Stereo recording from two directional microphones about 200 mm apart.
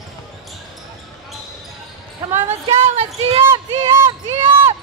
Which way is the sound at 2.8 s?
30° right (ahead or behind).